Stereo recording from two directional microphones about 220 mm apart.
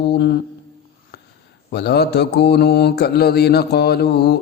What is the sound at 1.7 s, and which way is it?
Mantra, 45° left (ahead or behind).